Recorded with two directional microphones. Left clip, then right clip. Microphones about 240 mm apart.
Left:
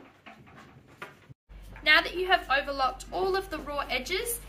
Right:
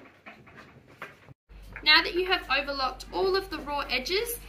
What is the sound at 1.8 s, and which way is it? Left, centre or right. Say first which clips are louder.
A woman's voice: right 1 dB; left.